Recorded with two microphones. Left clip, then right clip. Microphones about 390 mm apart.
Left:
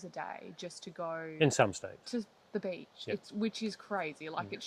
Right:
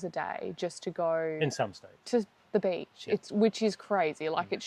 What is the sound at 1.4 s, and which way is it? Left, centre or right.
Speech, left.